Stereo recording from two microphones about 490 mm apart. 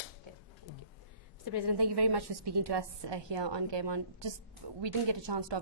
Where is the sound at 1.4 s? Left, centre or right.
Right.